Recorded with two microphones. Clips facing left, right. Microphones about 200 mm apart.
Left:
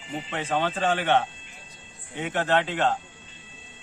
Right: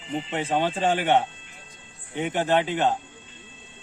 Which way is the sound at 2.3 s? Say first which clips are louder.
Right 1 dB; 15° right (ahead or behind).